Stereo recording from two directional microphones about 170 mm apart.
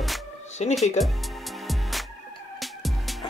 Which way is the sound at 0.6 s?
40° left (ahead or behind).